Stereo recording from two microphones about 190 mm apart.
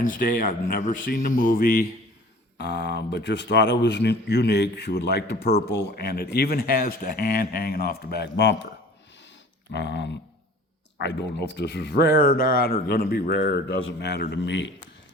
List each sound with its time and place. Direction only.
0.0 s speech: 45° left (ahead or behind)
2.6 s speech: 65° left (ahead or behind)
9.7 s a man's voice: 70° left (ahead or behind)